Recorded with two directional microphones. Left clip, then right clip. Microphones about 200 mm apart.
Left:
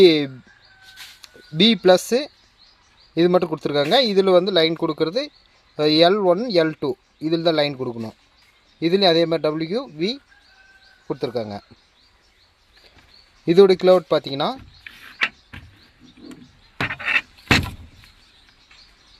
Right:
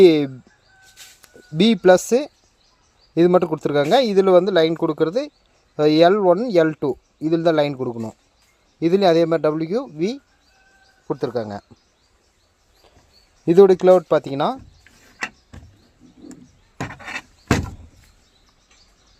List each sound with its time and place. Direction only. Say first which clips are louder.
0.0 s speech: right 1 dB; 5° right (ahead or behind)
1.5 s speech: right 1 dB; 5° right (ahead or behind)
13.4 s speech: right 1 dB; 5° right (ahead or behind)
14.3 s speech: right 2 dB; 35° right (ahead or behind)
14.8 s a sound: left 7 dB; 30° right (ahead or behind)
16.8 s a sound: left 10 dB; 30° right (ahead or behind)